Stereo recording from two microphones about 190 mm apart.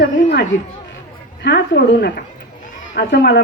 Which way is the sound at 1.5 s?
60° left (ahead or behind).